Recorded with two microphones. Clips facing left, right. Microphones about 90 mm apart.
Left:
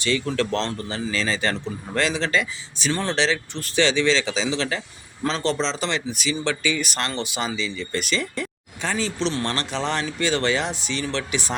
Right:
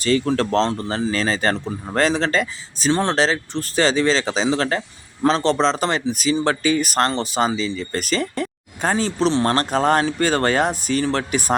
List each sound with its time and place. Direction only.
0.0 s speech: 40° right (ahead or behind)
5.5 s speech: 55° right (ahead or behind)